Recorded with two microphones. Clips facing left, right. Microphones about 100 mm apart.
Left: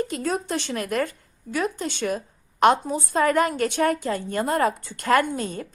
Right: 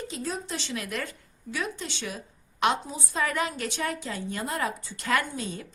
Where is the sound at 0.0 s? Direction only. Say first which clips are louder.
Left 8 dB; 60° left (ahead or behind).